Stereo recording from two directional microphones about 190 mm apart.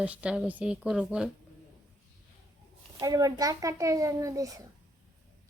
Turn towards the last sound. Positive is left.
turn(degrees=-15)  # may be behind; listen again after turning